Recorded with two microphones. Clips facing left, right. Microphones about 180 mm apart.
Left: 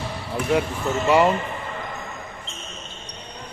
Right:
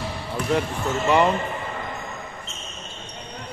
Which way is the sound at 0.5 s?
5° left (ahead or behind).